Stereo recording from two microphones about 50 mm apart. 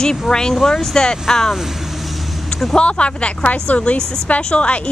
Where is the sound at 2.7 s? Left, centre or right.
Left.